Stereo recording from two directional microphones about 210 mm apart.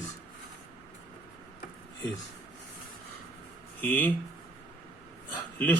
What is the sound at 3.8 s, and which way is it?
Speech, 10° left (ahead or behind).